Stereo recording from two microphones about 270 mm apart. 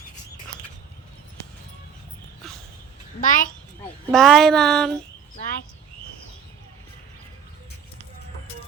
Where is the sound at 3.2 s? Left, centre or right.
Left.